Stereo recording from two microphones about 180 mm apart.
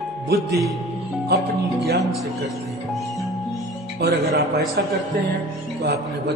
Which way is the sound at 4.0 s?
60° right (ahead or behind).